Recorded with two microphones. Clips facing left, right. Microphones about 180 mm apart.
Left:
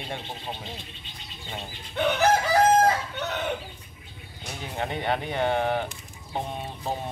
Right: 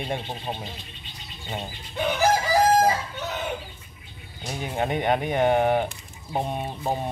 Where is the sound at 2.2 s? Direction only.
60° left (ahead or behind).